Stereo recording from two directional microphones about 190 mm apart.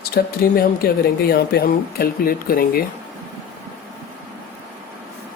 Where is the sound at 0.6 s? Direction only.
55° left (ahead or behind).